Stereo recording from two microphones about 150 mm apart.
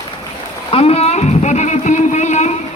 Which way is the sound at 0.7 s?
40° left (ahead or behind).